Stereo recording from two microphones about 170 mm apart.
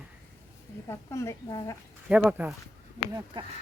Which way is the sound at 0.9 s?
15° left (ahead or behind).